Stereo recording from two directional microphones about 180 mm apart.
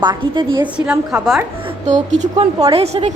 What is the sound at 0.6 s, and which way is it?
Speech, 5° right (ahead or behind).